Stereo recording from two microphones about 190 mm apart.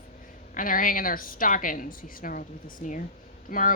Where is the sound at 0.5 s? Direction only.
45° left (ahead or behind).